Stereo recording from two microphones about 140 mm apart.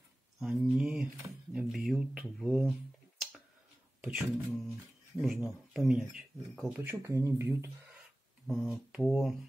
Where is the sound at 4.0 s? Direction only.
5° right (ahead or behind); by 7.7 s 20° right (ahead or behind).